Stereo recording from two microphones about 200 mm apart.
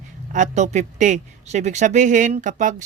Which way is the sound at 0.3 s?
35° right (ahead or behind).